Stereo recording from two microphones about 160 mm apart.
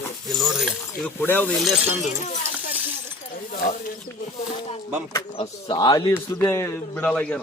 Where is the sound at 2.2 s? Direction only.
50° left (ahead or behind).